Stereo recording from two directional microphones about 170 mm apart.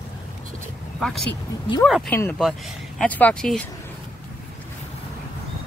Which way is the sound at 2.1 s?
15° left (ahead or behind).